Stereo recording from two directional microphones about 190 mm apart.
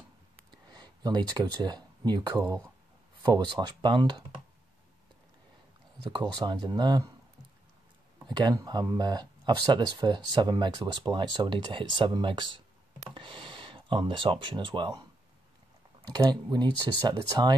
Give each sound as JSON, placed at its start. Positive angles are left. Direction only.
{"t": 0.7, "sound": "speech", "side_deg": -20}
{"t": 6.0, "sound": "speech", "side_deg": -25}
{"t": 8.3, "sound": "speech", "side_deg": -20}